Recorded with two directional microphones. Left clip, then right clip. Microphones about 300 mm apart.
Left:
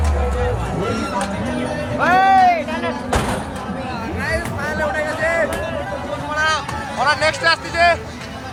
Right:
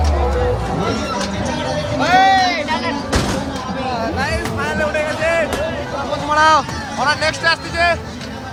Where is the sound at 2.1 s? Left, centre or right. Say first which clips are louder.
Even; centre.